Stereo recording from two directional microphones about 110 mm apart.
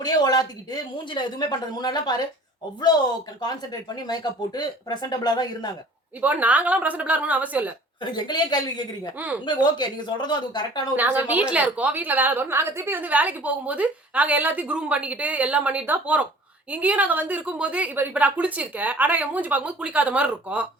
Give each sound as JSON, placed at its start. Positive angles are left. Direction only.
{"t": 0.0, "sound": "speech", "side_deg": 35}
{"t": 3.4, "sound": "speech", "side_deg": 40}
{"t": 6.2, "sound": "a woman's voice", "side_deg": -15}
{"t": 8.1, "sound": "speech", "side_deg": 40}
{"t": 9.1, "sound": "a woman's voice", "side_deg": -15}
{"t": 9.5, "sound": "speech", "side_deg": 40}
{"t": 10.9, "sound": "a woman's voice", "side_deg": -15}